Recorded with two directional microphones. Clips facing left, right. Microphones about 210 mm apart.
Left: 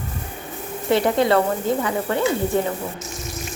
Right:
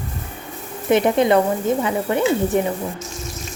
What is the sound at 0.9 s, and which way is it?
Speech, 20° right (ahead or behind).